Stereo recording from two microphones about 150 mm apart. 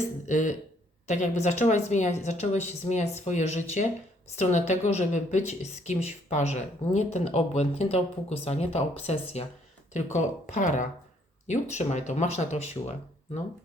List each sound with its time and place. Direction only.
0.3 s a man's voice: 55° left (ahead or behind)